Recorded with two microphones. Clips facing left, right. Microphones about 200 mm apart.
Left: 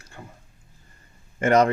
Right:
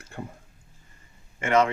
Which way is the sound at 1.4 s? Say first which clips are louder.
Left 4 dB; 40° left (ahead or behind).